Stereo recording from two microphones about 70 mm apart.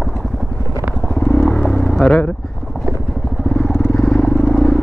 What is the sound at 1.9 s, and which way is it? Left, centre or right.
Speech, centre.